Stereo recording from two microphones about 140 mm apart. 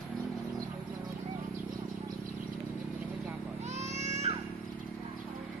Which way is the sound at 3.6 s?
55° right (ahead or behind).